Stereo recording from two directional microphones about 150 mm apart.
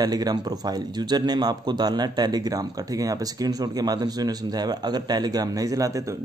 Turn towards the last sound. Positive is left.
turn(degrees=-25)  # may be behind; listen again after turning